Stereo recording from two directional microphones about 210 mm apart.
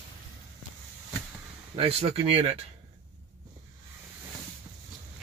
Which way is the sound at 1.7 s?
30° right (ahead or behind).